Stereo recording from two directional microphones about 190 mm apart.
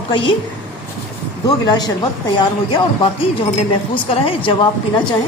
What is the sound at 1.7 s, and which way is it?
A woman's voice, 20° left (ahead or behind).